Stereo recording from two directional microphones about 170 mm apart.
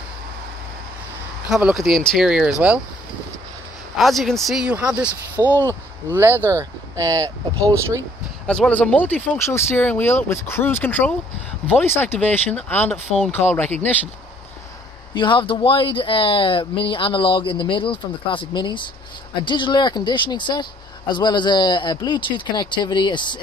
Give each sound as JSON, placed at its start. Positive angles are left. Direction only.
{"t": 1.5, "sound": "speech", "side_deg": -5}
{"t": 3.9, "sound": "speech", "side_deg": 0}
{"t": 5.4, "sound": "speech", "side_deg": 15}
{"t": 6.1, "sound": "speech", "side_deg": -15}
{"t": 8.5, "sound": "speech", "side_deg": 5}
{"t": 15.1, "sound": "speech", "side_deg": 30}